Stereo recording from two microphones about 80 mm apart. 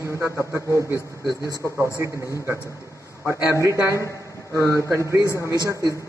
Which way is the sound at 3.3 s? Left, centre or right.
Right.